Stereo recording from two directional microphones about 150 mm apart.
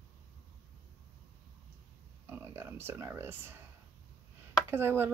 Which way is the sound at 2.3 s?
15° right (ahead or behind).